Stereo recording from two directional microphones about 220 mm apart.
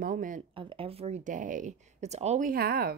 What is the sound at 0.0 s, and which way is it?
Speech, 35° right (ahead or behind).